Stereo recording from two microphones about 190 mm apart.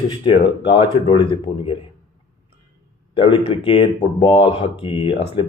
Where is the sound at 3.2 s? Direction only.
25° left (ahead or behind).